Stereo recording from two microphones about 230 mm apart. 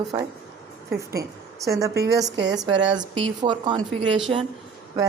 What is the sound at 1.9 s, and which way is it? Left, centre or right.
Speech, right.